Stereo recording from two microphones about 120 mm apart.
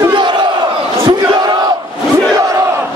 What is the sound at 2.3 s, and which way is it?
Crowd, 30° right (ahead or behind).